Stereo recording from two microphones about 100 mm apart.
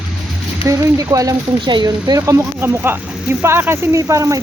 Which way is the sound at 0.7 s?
35° right (ahead or behind).